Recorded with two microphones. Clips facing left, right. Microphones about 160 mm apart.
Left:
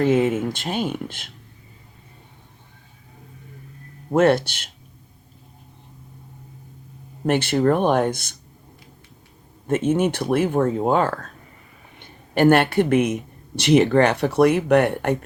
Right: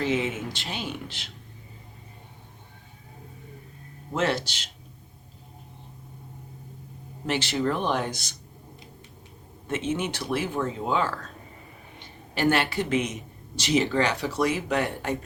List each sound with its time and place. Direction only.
0.0 s speech: 50° left (ahead or behind)
4.1 s speech: 55° left (ahead or behind)
7.3 s speech: 55° left (ahead or behind)
9.6 s speech: 50° left (ahead or behind); by 15.2 s 65° left (ahead or behind)